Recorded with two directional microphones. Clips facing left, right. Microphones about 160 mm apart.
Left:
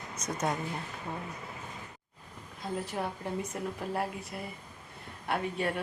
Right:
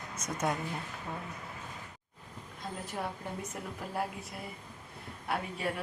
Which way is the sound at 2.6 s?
Centre (ahead or behind).